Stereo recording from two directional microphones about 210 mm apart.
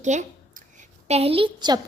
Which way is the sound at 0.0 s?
35° right (ahead or behind).